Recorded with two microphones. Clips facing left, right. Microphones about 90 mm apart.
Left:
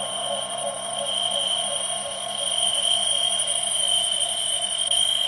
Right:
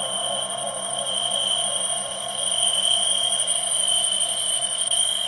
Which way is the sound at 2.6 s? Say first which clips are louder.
Even; 5° left (ahead or behind).